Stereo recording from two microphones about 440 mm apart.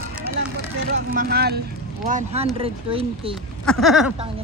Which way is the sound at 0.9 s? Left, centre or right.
Centre.